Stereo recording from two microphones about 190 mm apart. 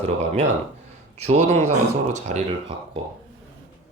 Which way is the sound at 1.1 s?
35° right (ahead or behind).